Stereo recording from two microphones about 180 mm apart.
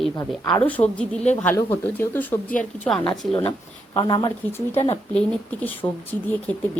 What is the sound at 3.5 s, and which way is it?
Speech, 25° left (ahead or behind).